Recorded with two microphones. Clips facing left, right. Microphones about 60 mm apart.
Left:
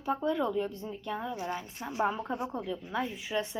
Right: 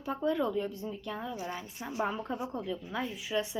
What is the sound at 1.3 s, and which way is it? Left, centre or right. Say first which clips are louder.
Speech: left 3 dB; left.